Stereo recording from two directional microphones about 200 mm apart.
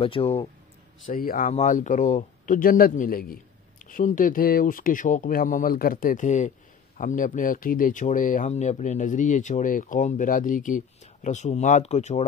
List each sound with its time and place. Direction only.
0.0 s speech: 30° left (ahead or behind)
1.0 s speech: 45° left (ahead or behind)